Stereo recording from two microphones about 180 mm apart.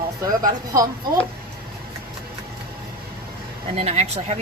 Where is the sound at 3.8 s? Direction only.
35° right (ahead or behind).